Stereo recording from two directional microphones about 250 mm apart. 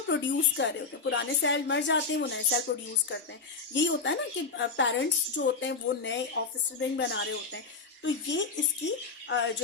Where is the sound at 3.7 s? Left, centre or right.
Left.